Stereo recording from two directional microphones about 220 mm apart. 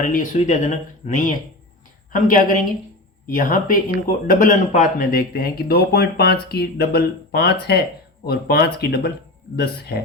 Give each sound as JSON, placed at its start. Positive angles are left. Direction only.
{"t": 0.0, "sound": "speech", "side_deg": 35}